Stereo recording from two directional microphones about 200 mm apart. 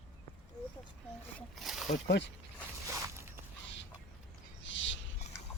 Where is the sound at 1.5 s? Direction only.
Centre (ahead or behind).